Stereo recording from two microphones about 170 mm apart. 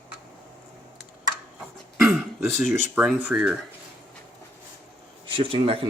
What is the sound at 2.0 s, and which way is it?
Throat clearing, centre (ahead or behind).